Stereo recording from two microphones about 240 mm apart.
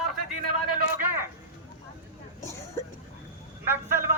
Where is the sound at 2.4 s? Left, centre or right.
Centre.